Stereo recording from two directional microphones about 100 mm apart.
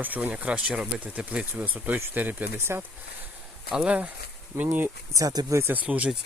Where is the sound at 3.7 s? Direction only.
10° right (ahead or behind).